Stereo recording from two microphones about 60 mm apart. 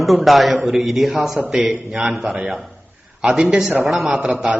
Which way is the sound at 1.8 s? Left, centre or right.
Centre.